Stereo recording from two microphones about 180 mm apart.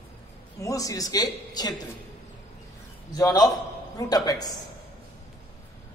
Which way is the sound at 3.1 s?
20° left (ahead or behind).